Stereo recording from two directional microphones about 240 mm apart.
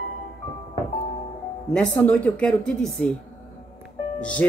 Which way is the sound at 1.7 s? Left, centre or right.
Centre.